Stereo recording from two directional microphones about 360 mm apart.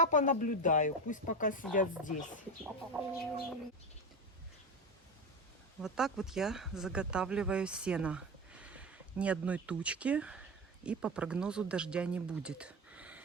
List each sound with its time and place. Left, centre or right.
0.0 s speech: left
2.9 s speech: centre
5.8 s speech: centre